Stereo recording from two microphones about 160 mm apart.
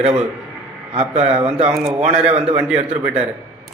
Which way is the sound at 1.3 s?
35° right (ahead or behind).